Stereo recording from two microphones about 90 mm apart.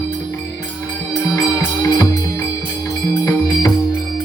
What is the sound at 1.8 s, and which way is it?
Music, 45° left (ahead or behind).